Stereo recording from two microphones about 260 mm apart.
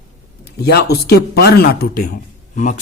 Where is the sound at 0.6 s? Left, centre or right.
Left.